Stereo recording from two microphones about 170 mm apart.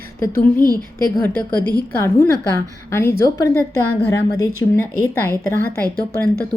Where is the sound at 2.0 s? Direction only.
15° left (ahead or behind).